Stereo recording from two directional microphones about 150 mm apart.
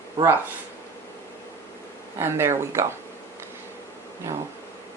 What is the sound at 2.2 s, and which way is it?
Speech, 15° right (ahead or behind).